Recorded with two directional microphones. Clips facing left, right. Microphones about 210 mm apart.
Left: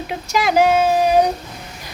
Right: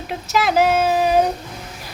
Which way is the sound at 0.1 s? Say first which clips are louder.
Even; centre (ahead or behind).